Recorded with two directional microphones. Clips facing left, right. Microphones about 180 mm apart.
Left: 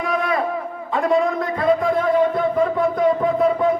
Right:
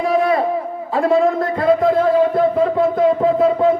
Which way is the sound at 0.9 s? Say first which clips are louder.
Right 3 dB; 30° right (ahead or behind).